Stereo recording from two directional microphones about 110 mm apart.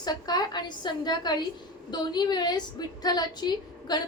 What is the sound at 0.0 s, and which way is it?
A woman's voice, 35° left (ahead or behind).